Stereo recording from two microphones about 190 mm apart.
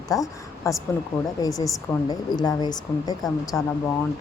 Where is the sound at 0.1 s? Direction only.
15° left (ahead or behind).